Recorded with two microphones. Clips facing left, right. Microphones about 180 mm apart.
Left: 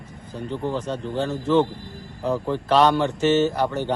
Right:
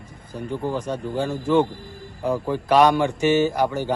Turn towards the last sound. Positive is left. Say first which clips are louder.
# right 1 dB
turn(degrees=-10)  # may be behind; listen again after turning